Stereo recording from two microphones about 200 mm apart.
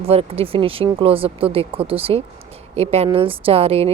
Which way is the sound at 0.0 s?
30° right (ahead or behind).